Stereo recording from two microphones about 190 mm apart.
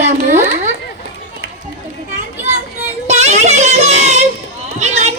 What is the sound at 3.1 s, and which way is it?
Music, 35° right (ahead or behind).